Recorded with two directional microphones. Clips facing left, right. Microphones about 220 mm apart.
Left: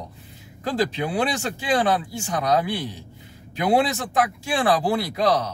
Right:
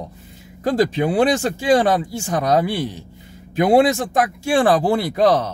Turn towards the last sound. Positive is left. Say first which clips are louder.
# right 5 dB
turn(degrees=-50)  # may be behind; listen again after turning